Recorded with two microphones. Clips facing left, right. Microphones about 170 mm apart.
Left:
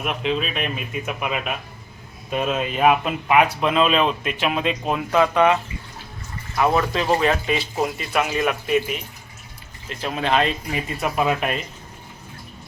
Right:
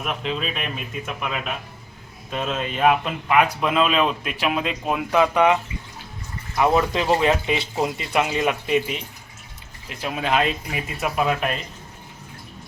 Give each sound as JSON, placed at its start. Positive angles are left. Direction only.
{"t": 0.0, "sound": "speech", "side_deg": 5}
{"t": 6.6, "sound": "speech", "side_deg": -20}
{"t": 9.9, "sound": "speech", "side_deg": -10}